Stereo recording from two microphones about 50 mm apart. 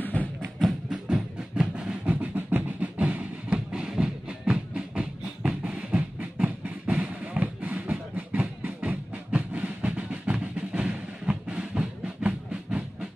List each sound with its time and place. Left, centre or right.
0.0 s music: left
0.7 s music: centre
2.0 s music: right
3.5 s music: centre
5.6 s a sound: right